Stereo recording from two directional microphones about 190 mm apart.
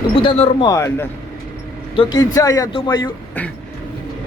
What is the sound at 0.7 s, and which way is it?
Speech, 15° left (ahead or behind).